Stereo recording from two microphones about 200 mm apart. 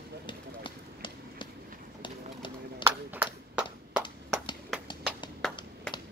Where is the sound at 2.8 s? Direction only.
10° right (ahead or behind).